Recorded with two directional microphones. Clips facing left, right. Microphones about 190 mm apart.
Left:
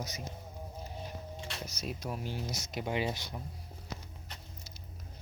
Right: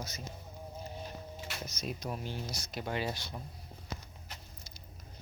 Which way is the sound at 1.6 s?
5° left (ahead or behind).